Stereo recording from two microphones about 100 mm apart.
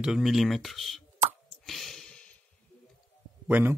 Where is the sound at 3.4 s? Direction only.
20° right (ahead or behind).